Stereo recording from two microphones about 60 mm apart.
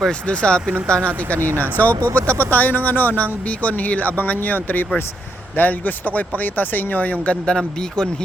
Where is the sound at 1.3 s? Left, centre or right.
Right.